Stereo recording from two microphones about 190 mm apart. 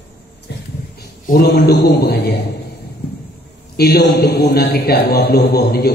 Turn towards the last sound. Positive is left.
turn(degrees=55)  # may be behind; listen again after turning